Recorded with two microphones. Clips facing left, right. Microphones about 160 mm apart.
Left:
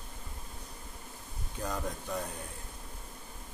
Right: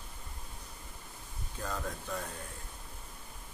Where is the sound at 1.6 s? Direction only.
15° left (ahead or behind).